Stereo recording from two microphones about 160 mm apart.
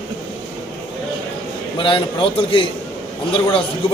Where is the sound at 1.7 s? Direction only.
30° left (ahead or behind).